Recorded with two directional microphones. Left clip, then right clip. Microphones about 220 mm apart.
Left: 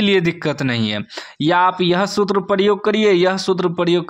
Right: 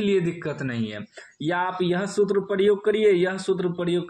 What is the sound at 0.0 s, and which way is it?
Speech, 30° left (ahead or behind).